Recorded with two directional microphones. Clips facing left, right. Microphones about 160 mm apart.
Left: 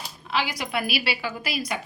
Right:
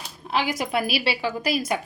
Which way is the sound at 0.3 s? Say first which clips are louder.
Right 3 dB; 50° right (ahead or behind).